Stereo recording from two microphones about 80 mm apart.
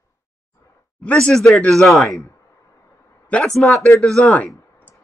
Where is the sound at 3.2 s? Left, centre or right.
Centre.